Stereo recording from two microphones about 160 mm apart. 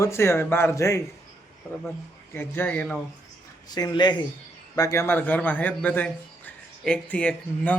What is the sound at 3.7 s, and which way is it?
A man's voice, 25° left (ahead or behind).